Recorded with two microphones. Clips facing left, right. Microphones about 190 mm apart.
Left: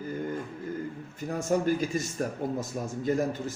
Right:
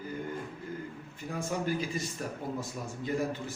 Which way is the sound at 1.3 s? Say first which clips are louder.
Left 6 dB; 45° left (ahead or behind).